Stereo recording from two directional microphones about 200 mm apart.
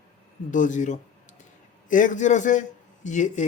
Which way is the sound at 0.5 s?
40° left (ahead or behind).